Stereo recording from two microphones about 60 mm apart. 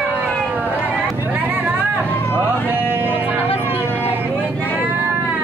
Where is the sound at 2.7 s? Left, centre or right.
Right.